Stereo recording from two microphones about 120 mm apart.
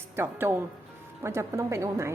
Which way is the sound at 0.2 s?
20° right (ahead or behind).